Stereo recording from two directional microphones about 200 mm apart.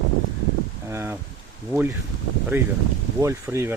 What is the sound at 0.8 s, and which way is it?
Speech, 10° right (ahead or behind).